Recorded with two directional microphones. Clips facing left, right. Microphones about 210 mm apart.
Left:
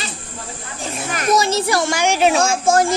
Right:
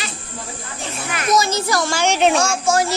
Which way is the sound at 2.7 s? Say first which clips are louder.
Left 3 dB; 50° left (ahead or behind).